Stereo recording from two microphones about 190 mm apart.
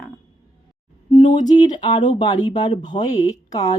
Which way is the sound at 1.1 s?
25° left (ahead or behind).